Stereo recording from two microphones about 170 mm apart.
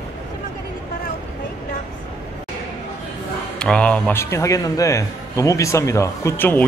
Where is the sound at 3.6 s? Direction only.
5° left (ahead or behind).